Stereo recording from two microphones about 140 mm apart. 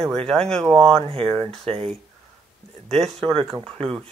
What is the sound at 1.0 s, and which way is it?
Speech, 45° right (ahead or behind).